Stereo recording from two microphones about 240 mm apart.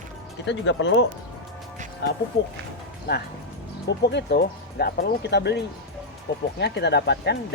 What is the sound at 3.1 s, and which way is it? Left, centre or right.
Speech, left.